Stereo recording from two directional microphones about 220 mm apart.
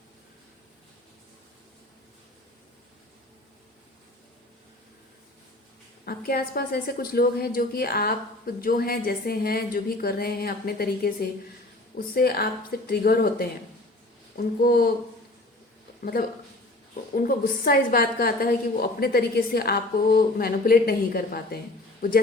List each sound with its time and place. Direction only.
6.1 s a woman's voice: 45° left (ahead or behind)
17.2 s a woman's voice: 40° left (ahead or behind)